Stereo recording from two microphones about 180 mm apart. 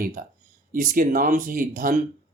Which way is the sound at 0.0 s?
50° right (ahead or behind).